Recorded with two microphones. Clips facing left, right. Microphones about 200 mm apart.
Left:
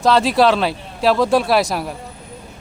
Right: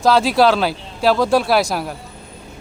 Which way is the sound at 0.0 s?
Centre (ahead or behind).